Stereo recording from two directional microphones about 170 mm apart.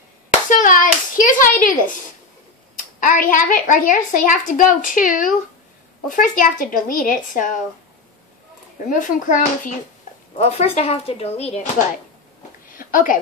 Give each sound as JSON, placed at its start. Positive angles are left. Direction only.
{"t": 0.5, "sound": "hands", "side_deg": 50}
{"t": 2.7, "sound": "a woman's voice", "side_deg": 55}
{"t": 8.8, "sound": "a woman's voice", "side_deg": 50}
{"t": 12.6, "sound": "a sound", "side_deg": 55}